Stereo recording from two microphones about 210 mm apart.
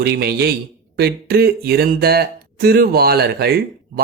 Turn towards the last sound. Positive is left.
turn(degrees=-50)  # may be behind; listen again after turning